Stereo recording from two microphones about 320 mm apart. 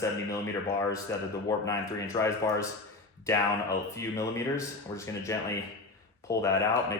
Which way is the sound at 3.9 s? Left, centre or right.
Centre.